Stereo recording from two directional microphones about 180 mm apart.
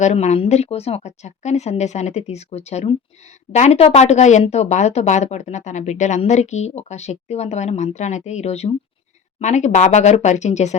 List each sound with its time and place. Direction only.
0.0 s speech: 40° left (ahead or behind)